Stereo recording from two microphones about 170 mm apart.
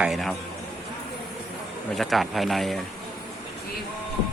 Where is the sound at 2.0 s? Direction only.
Centre (ahead or behind).